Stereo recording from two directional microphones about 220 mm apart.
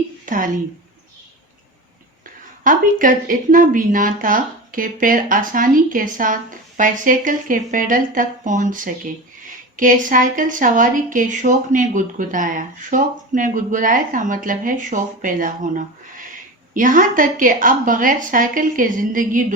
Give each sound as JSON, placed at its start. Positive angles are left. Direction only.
{"t": 0.3, "sound": "speech", "side_deg": -40}
{"t": 2.6, "sound": "a woman's voice", "side_deg": -40}